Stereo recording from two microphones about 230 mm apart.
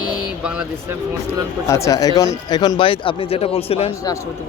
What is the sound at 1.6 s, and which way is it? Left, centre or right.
Speech, centre.